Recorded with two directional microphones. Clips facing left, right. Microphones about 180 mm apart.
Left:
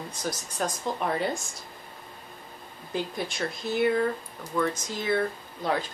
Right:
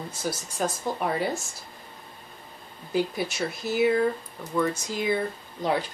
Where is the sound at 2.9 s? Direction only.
5° right (ahead or behind).